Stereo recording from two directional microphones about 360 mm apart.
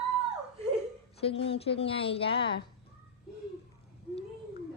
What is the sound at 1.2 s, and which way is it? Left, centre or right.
A woman's voice, centre.